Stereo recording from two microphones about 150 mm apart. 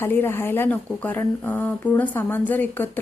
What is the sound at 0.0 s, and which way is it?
Speech, 15° left (ahead or behind).